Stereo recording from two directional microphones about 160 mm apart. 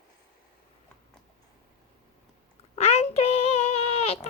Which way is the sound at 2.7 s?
40° left (ahead or behind).